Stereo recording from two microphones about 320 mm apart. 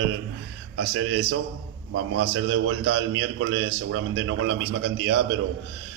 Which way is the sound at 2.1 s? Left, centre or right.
Right.